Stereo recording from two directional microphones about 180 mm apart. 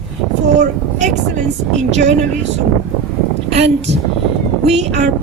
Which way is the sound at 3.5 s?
35° right (ahead or behind).